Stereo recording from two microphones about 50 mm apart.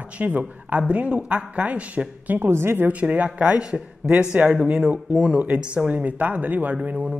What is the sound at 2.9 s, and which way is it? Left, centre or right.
A woman's voice, right.